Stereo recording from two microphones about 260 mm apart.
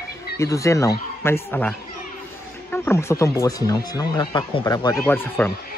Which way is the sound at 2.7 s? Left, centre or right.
Centre.